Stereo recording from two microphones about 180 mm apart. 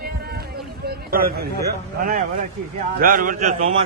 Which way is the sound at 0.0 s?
60° right (ahead or behind).